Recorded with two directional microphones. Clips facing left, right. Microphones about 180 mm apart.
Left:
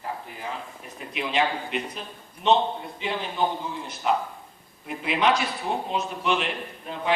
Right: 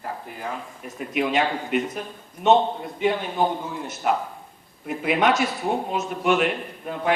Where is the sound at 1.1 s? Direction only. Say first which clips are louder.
Right 3 dB; 50° right (ahead or behind).